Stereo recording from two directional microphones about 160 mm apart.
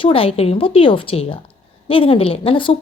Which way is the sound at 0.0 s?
35° left (ahead or behind).